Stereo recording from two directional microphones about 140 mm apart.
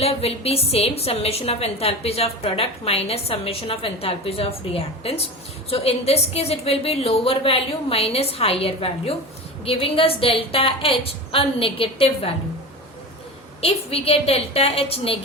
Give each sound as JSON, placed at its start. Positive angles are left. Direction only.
{"t": 0.0, "sound": "a woman's voice", "side_deg": 45}
{"t": 13.6, "sound": "a woman's voice", "side_deg": 45}